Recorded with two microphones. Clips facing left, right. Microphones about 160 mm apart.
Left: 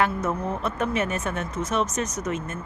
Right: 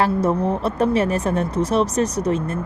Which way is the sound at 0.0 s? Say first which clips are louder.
Right 6 dB; 35° right (ahead or behind).